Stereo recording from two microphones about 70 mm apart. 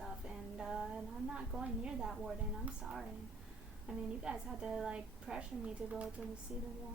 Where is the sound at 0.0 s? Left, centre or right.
Centre.